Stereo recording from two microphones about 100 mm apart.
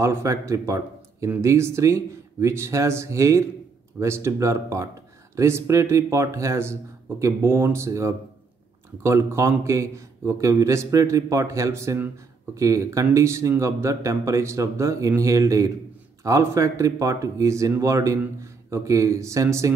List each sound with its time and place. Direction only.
0.0 s a man's voice: 30° right (ahead or behind)